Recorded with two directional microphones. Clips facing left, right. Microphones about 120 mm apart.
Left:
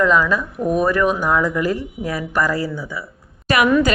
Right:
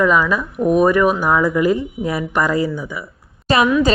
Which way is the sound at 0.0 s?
10° right (ahead or behind).